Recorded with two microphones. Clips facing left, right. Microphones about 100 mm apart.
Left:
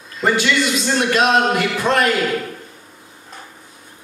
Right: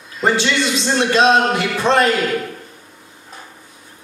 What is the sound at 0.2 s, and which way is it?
A man's voice, 25° right (ahead or behind).